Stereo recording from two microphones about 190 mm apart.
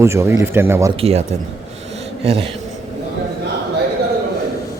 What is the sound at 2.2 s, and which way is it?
Speech, 30° right (ahead or behind).